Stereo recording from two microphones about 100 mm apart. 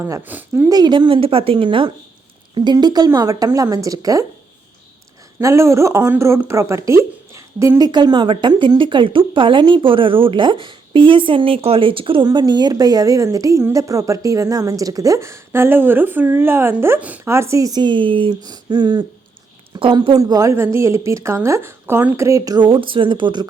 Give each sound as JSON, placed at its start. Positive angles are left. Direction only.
{"t": 0.3, "sound": "speech", "side_deg": -20}
{"t": 0.7, "sound": "a woman's voice", "side_deg": -45}
{"t": 2.6, "sound": "a woman's voice", "side_deg": -45}
{"t": 5.4, "sound": "a woman's voice", "side_deg": -30}
{"t": 7.9, "sound": "a woman's voice", "side_deg": -45}
{"t": 12.2, "sound": "a woman's voice", "side_deg": -45}
{"t": 19.7, "sound": "a sound", "side_deg": -45}
{"t": 20.1, "sound": "a woman's voice", "side_deg": -40}
{"t": 22.5, "sound": "speech", "side_deg": -55}